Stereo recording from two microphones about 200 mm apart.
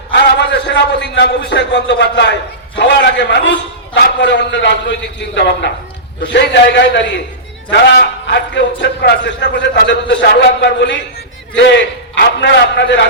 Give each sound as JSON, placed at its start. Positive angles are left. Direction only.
{"t": 0.1, "sound": "a man's voice", "side_deg": 60}
{"t": 12.1, "sound": "a man's voice", "side_deg": 60}